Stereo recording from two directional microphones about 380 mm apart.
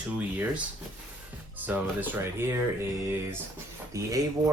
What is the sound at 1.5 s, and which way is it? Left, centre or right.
Speech, centre.